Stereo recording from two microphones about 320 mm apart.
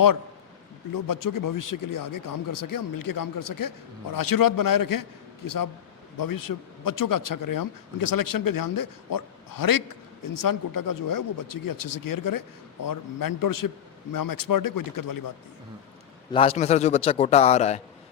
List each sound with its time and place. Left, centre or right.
0.9 s speech: left
6.1 s a man's voice: left
16.3 s a man's voice: centre